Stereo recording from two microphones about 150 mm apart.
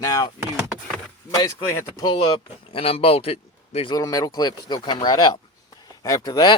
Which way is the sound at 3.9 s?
25° left (ahead or behind).